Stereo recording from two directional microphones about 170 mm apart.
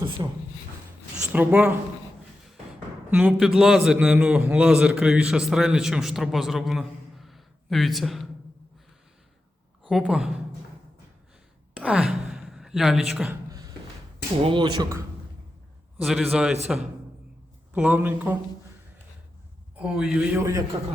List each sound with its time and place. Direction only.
0.2 s speech: 20° right (ahead or behind)
1.3 s a man's voice: 10° right (ahead or behind)
3.1 s a man's voice: 10° right (ahead or behind)
9.9 s a man's voice: 5° right (ahead or behind)
11.7 s gasp: 5° right (ahead or behind)
14.4 s speech: 30° right (ahead or behind)
16.0 s a man's voice: centre (ahead or behind)
19.8 s a man's voice: 5° right (ahead or behind)
20.4 s speech: 20° right (ahead or behind)